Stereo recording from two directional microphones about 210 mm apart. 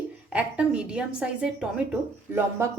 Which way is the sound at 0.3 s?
5° right (ahead or behind).